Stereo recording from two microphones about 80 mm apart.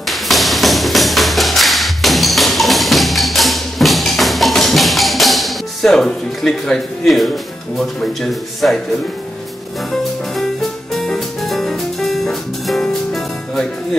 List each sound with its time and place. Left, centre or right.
0.1 s music: centre
7.8 s speech: centre
11.0 s music: centre